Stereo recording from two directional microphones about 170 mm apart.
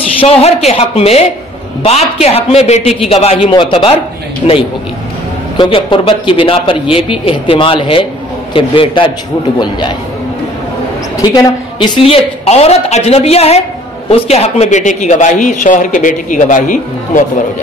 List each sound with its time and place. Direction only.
0.2 s a woman's voice: 35° left (ahead or behind)
5.6 s a woman's voice: 30° left (ahead or behind)
11.1 s a woman's voice: 20° left (ahead or behind); by 17.2 s 50° left (ahead or behind)